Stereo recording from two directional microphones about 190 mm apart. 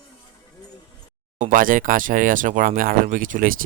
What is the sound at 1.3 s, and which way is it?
Speech, 45° right (ahead or behind).